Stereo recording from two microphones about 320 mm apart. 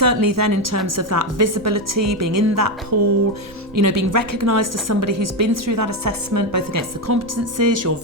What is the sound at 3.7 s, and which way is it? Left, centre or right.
Speech, right.